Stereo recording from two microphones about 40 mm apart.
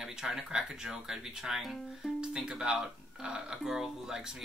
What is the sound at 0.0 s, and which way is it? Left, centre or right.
Speech, centre.